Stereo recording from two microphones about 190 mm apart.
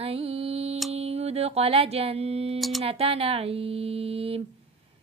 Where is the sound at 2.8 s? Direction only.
30° right (ahead or behind).